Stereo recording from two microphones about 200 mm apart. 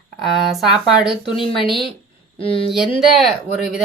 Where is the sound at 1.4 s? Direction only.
25° left (ahead or behind).